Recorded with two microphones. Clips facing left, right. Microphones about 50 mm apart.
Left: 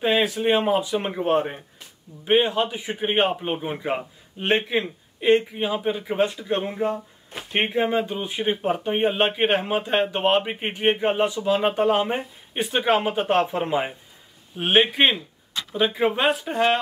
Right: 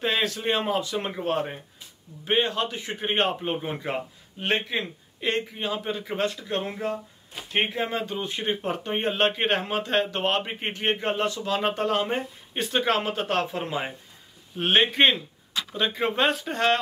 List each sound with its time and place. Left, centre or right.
0.0 s speech: centre